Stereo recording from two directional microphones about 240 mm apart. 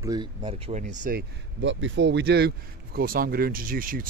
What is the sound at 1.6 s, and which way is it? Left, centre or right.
Speech, right.